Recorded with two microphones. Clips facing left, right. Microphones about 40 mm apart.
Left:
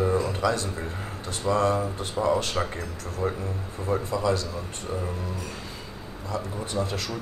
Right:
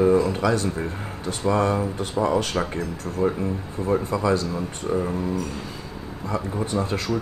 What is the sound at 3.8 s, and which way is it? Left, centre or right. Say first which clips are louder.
Speech: right 3 dB; right.